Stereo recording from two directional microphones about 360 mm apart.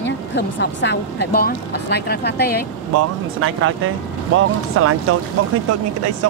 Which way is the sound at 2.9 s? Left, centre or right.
Right.